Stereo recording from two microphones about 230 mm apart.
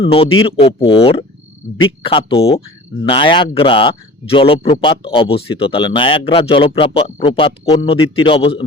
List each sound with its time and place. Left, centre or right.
0.0 s speech: left